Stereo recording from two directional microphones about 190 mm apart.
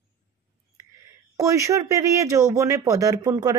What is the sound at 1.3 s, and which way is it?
Speech, 15° right (ahead or behind).